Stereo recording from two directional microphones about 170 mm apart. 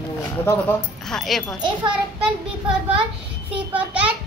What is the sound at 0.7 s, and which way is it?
Speech, centre (ahead or behind).